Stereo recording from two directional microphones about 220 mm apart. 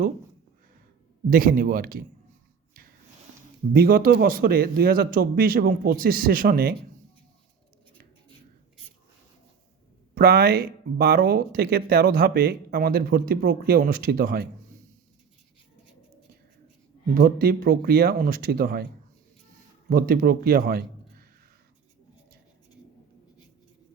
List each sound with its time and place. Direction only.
1.3 s speech: 40° right (ahead or behind)
3.7 s speech: 40° right (ahead or behind)
10.2 s speech: 45° right (ahead or behind)
17.2 s speech: 40° right (ahead or behind)
19.9 s a man's voice: 40° right (ahead or behind)